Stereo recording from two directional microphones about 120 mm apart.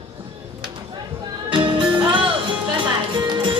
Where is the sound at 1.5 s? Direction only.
45° right (ahead or behind).